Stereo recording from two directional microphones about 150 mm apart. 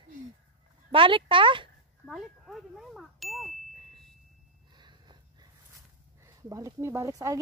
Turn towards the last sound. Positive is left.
turn(degrees=-20)  # may be behind; listen again after turning